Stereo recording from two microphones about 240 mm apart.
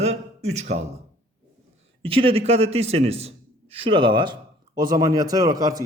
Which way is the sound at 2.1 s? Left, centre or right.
Right.